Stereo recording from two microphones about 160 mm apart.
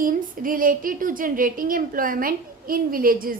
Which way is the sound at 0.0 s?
60° right (ahead or behind).